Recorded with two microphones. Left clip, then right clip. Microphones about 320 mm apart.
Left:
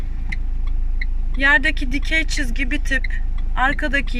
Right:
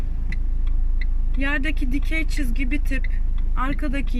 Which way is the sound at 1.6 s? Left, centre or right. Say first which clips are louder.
Left 7 dB; left.